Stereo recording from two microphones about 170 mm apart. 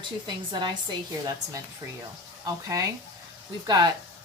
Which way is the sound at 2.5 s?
20° right (ahead or behind).